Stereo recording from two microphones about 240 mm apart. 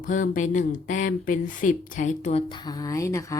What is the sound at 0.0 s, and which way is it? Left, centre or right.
Speech, left.